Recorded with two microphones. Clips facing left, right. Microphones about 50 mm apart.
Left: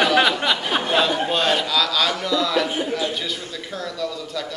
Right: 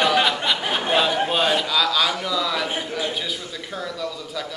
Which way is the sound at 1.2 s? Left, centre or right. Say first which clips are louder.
Even; centre.